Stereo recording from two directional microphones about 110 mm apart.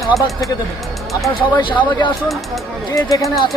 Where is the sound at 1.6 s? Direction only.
45° left (ahead or behind).